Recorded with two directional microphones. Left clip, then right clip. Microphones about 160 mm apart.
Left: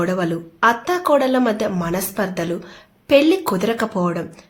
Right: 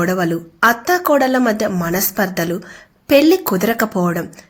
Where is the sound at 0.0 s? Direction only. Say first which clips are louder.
Right 3 dB; 20° right (ahead or behind).